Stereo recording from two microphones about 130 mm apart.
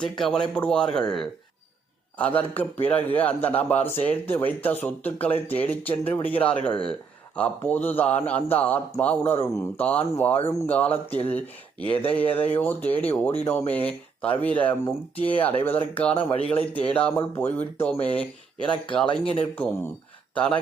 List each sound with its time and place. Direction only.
0.0 s a man's voice: 5° left (ahead or behind)
19.0 s speech: 45° left (ahead or behind)
19.5 s a man's voice: 15° left (ahead or behind)